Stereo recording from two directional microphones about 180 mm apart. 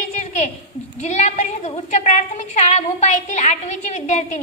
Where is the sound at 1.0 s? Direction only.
40° left (ahead or behind).